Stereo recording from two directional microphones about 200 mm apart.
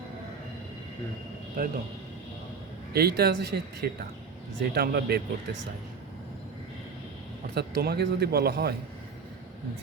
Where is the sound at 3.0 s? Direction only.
55° right (ahead or behind).